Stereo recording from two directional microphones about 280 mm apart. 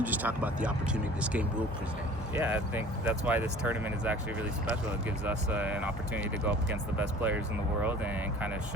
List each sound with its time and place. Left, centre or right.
0.0 s speech: centre
5.2 s speech: centre